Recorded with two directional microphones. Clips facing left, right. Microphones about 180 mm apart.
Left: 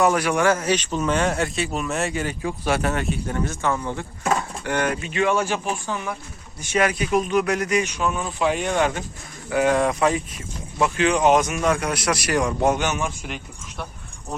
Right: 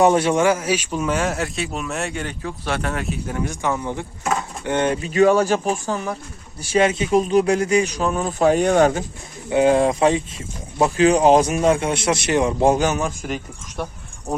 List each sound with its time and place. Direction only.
0.0 s speech: 25° right (ahead or behind)
0.4 s speech: 10° right (ahead or behind); by 9.0 s 40° right (ahead or behind)
9.5 s speech: 25° right (ahead or behind)